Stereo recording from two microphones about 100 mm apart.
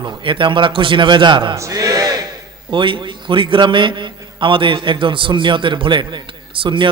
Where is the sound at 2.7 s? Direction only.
55° right (ahead or behind).